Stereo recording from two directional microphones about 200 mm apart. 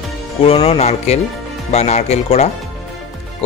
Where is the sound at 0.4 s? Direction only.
30° left (ahead or behind).